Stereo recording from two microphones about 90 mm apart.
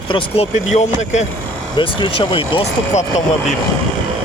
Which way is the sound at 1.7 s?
65° left (ahead or behind).